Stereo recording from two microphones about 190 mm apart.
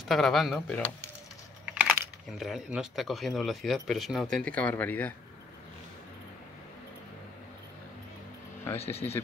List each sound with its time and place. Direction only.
0.1 s speech: centre (ahead or behind)
2.3 s speech: centre (ahead or behind)
8.7 s speech: 30° left (ahead or behind)